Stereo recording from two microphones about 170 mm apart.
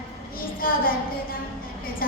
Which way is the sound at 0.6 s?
55° left (ahead or behind).